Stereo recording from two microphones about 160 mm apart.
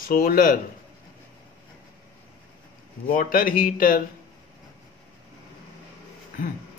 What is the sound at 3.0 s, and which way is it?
A man's voice, 60° left (ahead or behind).